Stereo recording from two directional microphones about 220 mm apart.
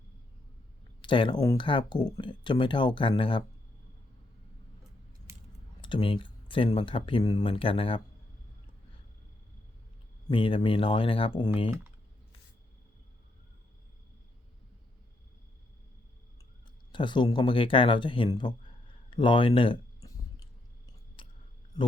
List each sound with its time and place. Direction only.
1.0 s speech: 20° left (ahead or behind)
5.8 s speech: 25° left (ahead or behind)
10.2 s speech: 25° left (ahead or behind)
16.9 s speech: 20° left (ahead or behind)
19.1 s a sound: 20° left (ahead or behind)
21.2 s clicking: 20° left (ahead or behind)